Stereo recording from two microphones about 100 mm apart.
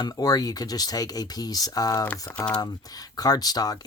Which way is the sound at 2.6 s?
40° left (ahead or behind).